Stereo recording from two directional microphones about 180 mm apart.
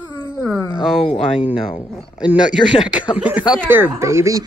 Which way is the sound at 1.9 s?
5° right (ahead or behind).